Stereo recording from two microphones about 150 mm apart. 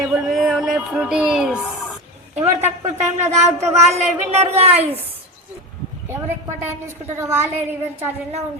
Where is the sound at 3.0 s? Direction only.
50° right (ahead or behind).